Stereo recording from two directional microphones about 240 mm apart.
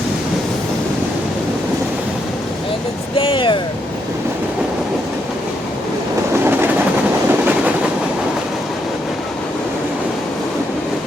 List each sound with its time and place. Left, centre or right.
3.2 s speech: left
6.3 s train: centre